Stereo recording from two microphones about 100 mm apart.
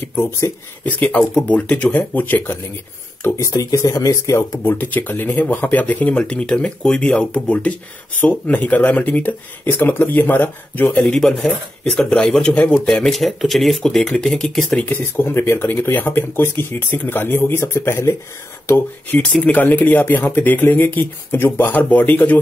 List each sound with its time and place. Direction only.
0.1 s speech: 20° left (ahead or behind)
11.0 s speech: 5° left (ahead or behind)
14.9 s speech: 20° left (ahead or behind)
18.7 s speech: 15° left (ahead or behind)